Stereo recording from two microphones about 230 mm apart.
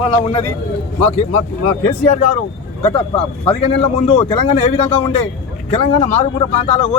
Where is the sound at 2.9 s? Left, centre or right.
Left.